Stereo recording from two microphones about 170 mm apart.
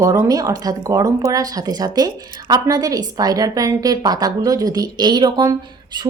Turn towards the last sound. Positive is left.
turn(degrees=-25)  # may be behind; listen again after turning